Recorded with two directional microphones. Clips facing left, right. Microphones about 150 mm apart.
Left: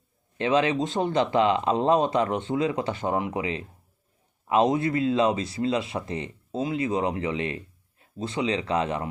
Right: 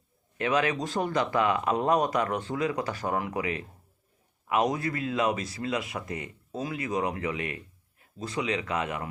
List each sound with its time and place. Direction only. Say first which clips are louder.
0.3 s speech: left 4 dB; 25° left (ahead or behind)